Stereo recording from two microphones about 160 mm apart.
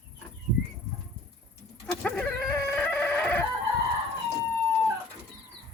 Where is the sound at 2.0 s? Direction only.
10° left (ahead or behind).